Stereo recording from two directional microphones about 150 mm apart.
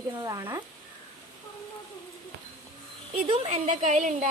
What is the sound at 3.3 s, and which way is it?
A woman's voice, 45° right (ahead or behind).